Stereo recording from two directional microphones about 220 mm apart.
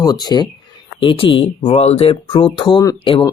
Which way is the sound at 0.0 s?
20° left (ahead or behind).